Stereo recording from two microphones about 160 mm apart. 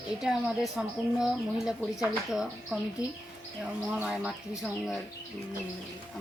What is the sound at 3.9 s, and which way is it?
Speech, centre (ahead or behind).